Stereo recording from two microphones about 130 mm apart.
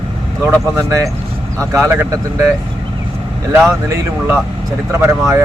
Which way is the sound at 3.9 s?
15° right (ahead or behind).